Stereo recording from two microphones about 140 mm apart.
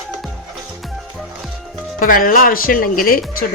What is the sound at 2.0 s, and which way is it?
Speech, 85° left.